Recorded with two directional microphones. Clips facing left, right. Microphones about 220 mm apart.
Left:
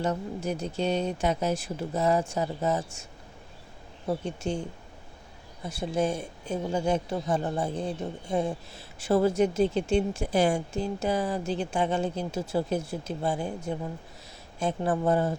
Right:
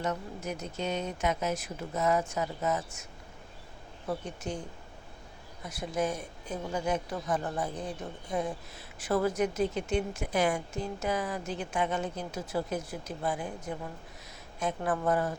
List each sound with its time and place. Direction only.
0.0 s speech: 30° left (ahead or behind)
5.6 s speech: 30° left (ahead or behind)